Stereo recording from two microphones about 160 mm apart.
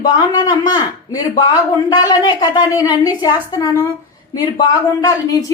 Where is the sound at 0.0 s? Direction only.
25° left (ahead or behind).